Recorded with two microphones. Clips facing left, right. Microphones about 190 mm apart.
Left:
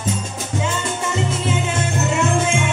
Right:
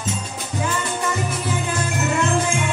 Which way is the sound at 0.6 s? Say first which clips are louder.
Right 1 dB; 25° left (ahead or behind).